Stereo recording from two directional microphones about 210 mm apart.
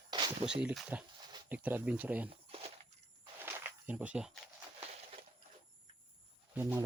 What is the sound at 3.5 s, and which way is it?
Snake, 5° right (ahead or behind).